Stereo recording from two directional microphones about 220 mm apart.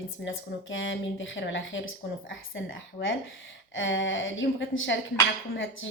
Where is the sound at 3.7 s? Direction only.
60° left (ahead or behind).